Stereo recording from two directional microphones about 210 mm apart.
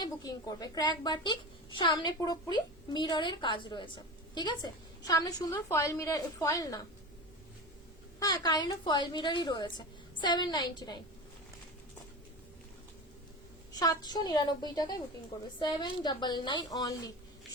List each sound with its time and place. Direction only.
0.0 s a woman's voice: 20° left (ahead or behind)
8.2 s a woman's voice: 15° left (ahead or behind)
13.7 s a woman's voice: 20° left (ahead or behind)